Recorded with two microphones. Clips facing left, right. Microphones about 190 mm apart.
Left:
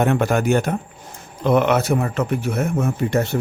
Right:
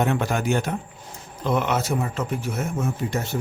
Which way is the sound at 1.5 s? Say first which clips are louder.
Left 6 dB; 60° left (ahead or behind).